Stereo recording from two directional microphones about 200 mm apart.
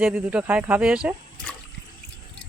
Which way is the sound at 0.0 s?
10° right (ahead or behind).